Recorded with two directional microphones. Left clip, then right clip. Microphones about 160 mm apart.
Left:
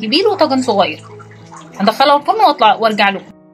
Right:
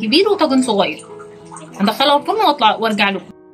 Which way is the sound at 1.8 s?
10° left (ahead or behind).